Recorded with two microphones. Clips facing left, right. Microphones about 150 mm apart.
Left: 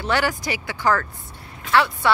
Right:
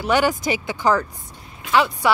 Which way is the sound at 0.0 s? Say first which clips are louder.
Right 4 dB; 20° right (ahead or behind).